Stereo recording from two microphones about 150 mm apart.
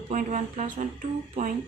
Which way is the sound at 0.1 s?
60° right (ahead or behind).